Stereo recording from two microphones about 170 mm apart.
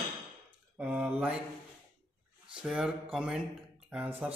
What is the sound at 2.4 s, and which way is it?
A man's voice, 5° right (ahead or behind).